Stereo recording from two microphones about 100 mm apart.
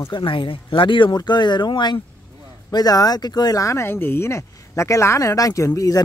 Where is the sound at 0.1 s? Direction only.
55° left (ahead or behind).